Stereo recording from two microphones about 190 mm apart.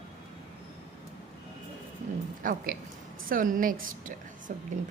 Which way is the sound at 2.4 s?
45° right (ahead or behind).